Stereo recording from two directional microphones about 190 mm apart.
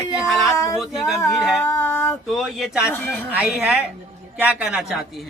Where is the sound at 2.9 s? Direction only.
10° left (ahead or behind).